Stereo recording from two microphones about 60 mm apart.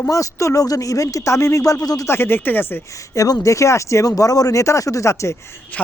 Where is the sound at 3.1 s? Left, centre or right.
Left.